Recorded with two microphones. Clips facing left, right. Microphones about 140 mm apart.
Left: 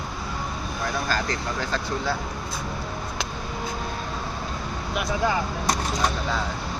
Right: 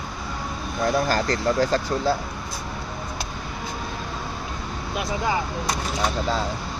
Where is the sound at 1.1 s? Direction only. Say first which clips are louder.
Right 5 dB; 40° right (ahead or behind).